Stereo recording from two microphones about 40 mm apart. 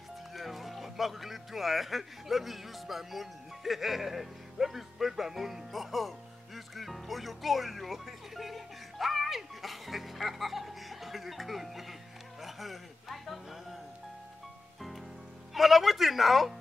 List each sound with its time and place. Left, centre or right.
0.3 s speech: centre
14.8 s rain on surface: centre
15.5 s speech: centre